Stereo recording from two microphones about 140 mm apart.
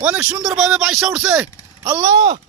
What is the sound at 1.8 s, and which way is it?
Speech, 25° right (ahead or behind).